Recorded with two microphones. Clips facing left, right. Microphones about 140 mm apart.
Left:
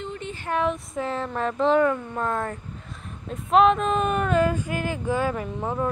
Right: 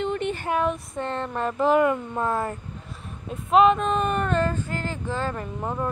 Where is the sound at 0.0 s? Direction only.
70° right (ahead or behind).